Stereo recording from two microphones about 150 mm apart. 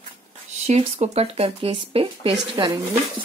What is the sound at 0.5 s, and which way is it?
Speech, 45° right (ahead or behind).